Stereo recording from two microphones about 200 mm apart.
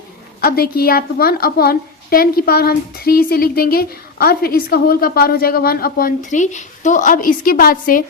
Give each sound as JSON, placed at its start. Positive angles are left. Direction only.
{"t": 0.4, "sound": "a woman's voice", "side_deg": 50}